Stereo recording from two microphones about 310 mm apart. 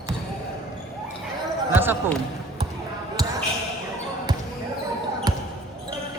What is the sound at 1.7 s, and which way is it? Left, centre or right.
Basketball bounce, centre.